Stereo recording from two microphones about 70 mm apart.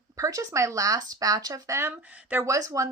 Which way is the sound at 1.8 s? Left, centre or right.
Right.